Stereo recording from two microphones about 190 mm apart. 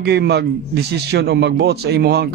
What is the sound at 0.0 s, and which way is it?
A man's voice, 60° right (ahead or behind).